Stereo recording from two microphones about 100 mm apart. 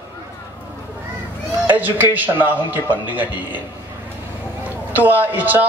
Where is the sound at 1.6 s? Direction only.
20° right (ahead or behind).